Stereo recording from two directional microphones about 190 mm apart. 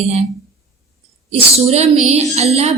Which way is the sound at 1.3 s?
35° right (ahead or behind).